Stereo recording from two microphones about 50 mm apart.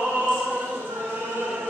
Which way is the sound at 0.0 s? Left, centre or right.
Right.